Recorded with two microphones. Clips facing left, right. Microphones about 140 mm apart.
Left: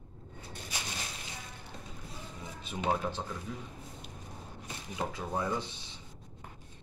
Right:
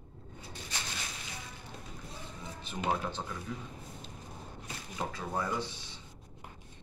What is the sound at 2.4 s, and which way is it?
Speech, 5° left (ahead or behind).